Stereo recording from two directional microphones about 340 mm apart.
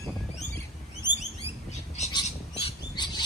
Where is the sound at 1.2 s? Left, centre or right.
Centre.